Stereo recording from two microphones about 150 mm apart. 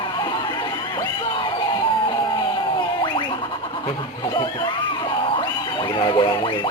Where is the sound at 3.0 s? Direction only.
35° left (ahead or behind).